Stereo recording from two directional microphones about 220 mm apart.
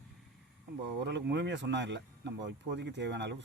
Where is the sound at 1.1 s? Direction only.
55° right (ahead or behind).